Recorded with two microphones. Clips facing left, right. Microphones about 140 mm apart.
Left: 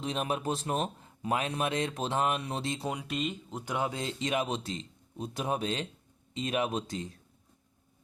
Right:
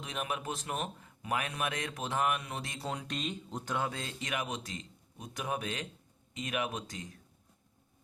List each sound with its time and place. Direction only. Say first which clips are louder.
0.0 s speech: left 6 dB; 30° left (ahead or behind)
2.9 s speech: left 3 dB; 10° left (ahead or behind)
3.8 s speech: left 5 dB; 20° left (ahead or behind)